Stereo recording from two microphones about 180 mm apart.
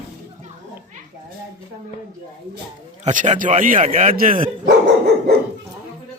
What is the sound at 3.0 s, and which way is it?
A man's voice, 40° right (ahead or behind).